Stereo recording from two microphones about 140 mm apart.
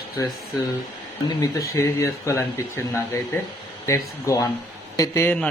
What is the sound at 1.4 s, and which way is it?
Speech, 20° left (ahead or behind).